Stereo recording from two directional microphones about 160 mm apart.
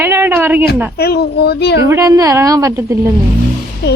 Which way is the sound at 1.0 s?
85° left.